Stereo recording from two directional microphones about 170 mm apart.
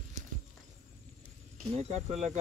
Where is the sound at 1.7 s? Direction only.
40° right (ahead or behind).